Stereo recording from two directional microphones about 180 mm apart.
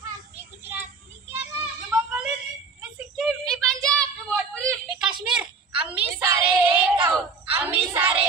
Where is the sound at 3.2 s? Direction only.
Centre (ahead or behind).